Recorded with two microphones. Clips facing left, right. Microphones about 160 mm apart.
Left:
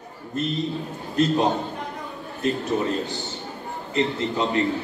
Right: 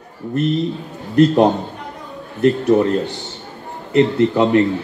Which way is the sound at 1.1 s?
70° right (ahead or behind).